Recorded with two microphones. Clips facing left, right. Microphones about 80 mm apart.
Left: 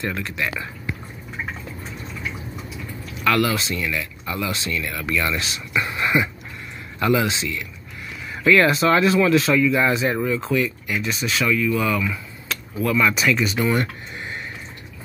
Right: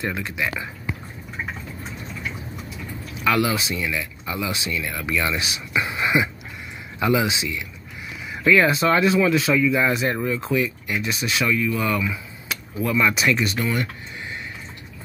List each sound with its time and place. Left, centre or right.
0.0 s speech: centre
3.3 s speech: centre
8.3 s speech: centre
12.5 s a sound: centre
12.8 s speech: centre
14.1 s a sound: left